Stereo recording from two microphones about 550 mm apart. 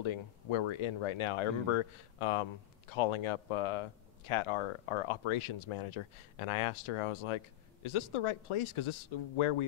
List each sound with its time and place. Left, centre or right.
0.0 s speech: left